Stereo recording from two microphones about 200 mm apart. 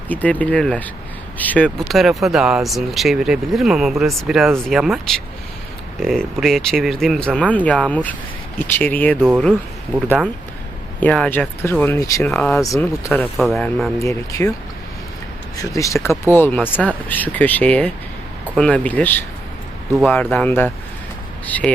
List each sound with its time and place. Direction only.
0.1 s speech: 5° left (ahead or behind)
11.0 s speech: 5° left (ahead or behind)
12.3 s speech: 5° left (ahead or behind)
12.6 s speech: 15° left (ahead or behind)
13.1 s speech: 5° left (ahead or behind)
14.0 s speech: 15° left (ahead or behind)
15.5 s speech: 15° left (ahead or behind)